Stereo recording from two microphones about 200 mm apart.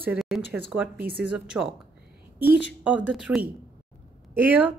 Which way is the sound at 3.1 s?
5° right (ahead or behind).